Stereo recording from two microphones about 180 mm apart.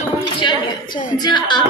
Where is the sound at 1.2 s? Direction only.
25° left (ahead or behind).